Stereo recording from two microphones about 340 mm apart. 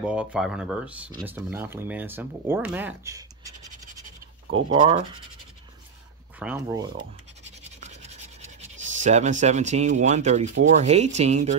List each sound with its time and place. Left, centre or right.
0.0 s speech: centre
4.6 s speech: centre
6.4 s speech: centre
8.9 s speech: right